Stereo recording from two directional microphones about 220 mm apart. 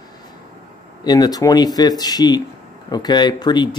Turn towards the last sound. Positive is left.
turn(degrees=20)  # may be behind; listen again after turning